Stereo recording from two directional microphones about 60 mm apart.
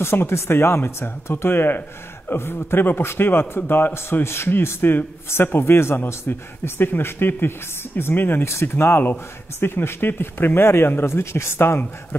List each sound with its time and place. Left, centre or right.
0.0 s a man's voice: left
8.5 s a man's voice: left